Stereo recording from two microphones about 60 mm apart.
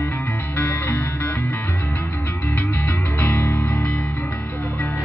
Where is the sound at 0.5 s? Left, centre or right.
Left.